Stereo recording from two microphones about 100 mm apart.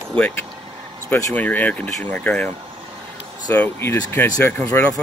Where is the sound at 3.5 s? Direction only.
20° left (ahead or behind).